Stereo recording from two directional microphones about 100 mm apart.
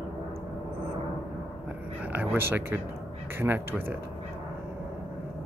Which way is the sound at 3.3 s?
20° right (ahead or behind).